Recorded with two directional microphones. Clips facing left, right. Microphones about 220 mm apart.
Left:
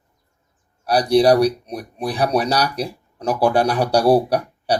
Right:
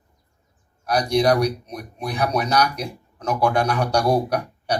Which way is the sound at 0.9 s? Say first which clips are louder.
Left 4 dB; 35° left (ahead or behind).